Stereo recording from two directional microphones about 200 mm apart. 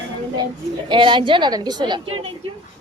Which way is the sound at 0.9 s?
25° right (ahead or behind).